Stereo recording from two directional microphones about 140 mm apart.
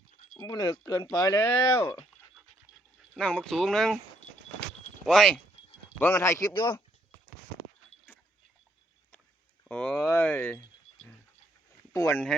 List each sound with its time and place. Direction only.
0.3 s speech: 25° left (ahead or behind)
3.2 s speech: 5° left (ahead or behind)
5.0 s speech: 5° left (ahead or behind)
6.0 s speech: 15° left (ahead or behind)
6.5 s speech: 35° left (ahead or behind)
9.6 s a sound: 5° left (ahead or behind)
10.1 s speech: 15° left (ahead or behind)
11.9 s speech: 20° left (ahead or behind)